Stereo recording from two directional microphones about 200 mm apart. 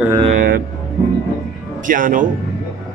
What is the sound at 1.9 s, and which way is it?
Speech, 40° right (ahead or behind).